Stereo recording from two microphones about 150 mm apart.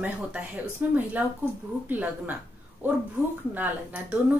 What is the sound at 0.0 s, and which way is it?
Speech, 10° right (ahead or behind).